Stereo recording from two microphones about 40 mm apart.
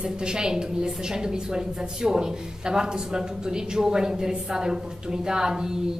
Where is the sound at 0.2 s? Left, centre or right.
Centre.